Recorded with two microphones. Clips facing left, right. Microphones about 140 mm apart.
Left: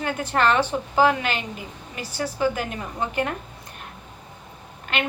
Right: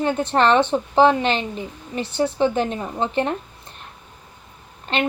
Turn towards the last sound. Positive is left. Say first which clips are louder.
# right 4 dB
turn(degrees=-30)  # may be behind; listen again after turning